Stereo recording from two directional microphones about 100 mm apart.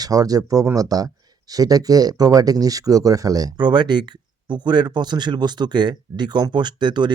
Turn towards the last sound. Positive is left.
turn(degrees=-50)  # may be behind; listen again after turning